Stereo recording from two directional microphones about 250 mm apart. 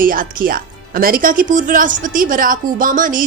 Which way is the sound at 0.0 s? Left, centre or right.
Right.